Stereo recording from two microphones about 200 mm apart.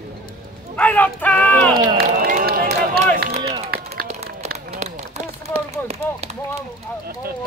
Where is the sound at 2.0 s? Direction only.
45° right (ahead or behind).